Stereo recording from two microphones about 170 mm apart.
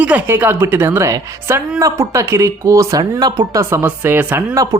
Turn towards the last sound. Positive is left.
turn(degrees=-10)  # may be behind; listen again after turning